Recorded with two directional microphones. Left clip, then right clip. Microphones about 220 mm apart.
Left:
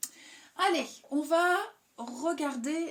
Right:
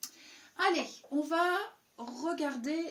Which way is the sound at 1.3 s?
45° left (ahead or behind).